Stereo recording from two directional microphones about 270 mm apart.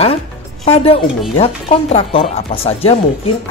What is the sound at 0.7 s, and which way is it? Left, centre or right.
Speech, left.